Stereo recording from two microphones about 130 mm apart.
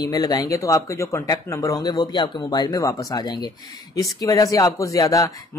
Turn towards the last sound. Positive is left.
turn(degrees=25)  # may be behind; listen again after turning